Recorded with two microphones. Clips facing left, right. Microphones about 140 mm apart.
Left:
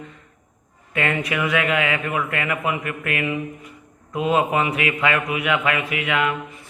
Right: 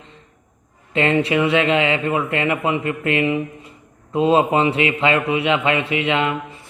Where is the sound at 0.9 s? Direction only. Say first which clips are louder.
Right 6 dB; 25° right (ahead or behind).